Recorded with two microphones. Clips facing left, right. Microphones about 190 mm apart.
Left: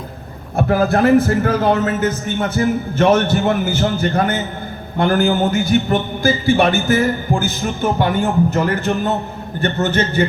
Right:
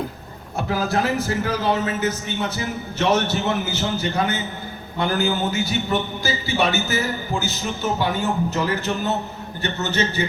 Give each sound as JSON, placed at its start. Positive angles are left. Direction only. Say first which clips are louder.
{"t": 0.5, "sound": "a man's voice", "louder": "left 7 dB", "side_deg": 55}